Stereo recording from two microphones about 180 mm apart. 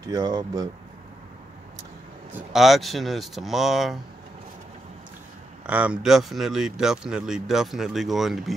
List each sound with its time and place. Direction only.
0.1 s speech: 20° right (ahead or behind)
2.3 s speech: centre (ahead or behind)
5.7 s speech: 5° right (ahead or behind)